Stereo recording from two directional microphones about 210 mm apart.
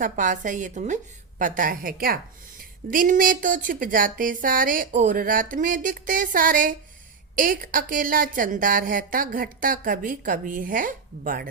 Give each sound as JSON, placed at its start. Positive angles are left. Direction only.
{"t": 0.0, "sound": "a woman's voice", "side_deg": -40}